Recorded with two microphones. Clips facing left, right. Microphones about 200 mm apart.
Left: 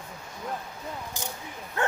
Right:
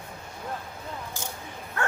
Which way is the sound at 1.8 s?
15° left (ahead or behind).